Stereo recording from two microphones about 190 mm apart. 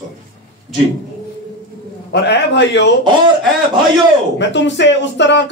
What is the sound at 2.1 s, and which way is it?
Speech, 65° left (ahead or behind).